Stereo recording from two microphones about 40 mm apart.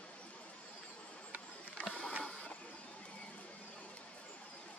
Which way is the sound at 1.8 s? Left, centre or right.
Left.